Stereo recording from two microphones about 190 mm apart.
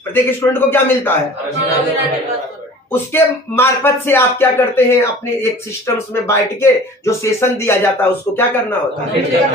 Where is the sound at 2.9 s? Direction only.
10° left (ahead or behind).